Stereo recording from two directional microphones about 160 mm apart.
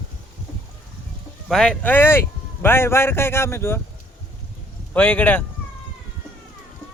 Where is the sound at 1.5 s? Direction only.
5° left (ahead or behind).